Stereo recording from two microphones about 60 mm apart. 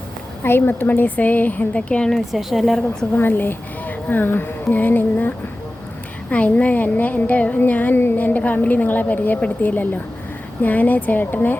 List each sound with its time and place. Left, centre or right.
0.4 s a woman's voice: left
2.0 s a woman's voice: centre
3.2 s a woman's voice: left
6.3 s a woman's voice: left